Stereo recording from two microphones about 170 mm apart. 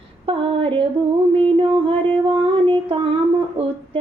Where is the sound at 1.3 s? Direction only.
30° right (ahead or behind).